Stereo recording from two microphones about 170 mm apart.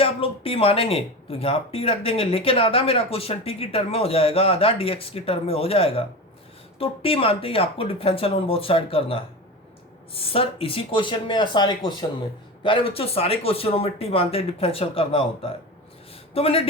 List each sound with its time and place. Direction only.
0.0 s speech: 35° left (ahead or behind)